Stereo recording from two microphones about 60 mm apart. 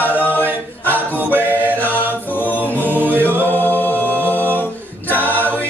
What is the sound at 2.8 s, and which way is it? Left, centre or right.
A capella, right.